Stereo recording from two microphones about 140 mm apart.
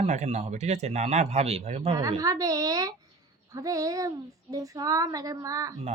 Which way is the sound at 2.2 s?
25° right (ahead or behind).